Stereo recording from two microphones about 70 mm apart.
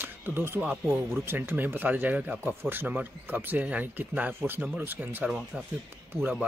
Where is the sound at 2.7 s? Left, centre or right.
Right.